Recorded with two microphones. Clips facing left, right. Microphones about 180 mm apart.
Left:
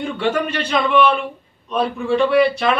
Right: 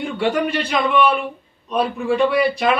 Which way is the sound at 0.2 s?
10° right (ahead or behind).